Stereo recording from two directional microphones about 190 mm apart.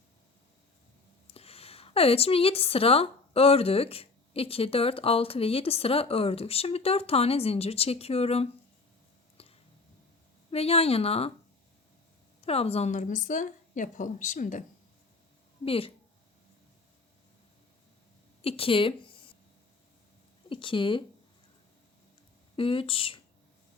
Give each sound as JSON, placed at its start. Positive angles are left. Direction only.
{"t": 1.3, "sound": "speech", "side_deg": 30}
{"t": 9.4, "sound": "a sound", "side_deg": 30}
{"t": 10.5, "sound": "speech", "side_deg": 30}
{"t": 12.4, "sound": "speech", "side_deg": 30}
{"t": 15.6, "sound": "speech", "side_deg": 30}
{"t": 18.4, "sound": "speech", "side_deg": 30}
{"t": 20.5, "sound": "speech", "side_deg": 25}
{"t": 22.5, "sound": "speech", "side_deg": 30}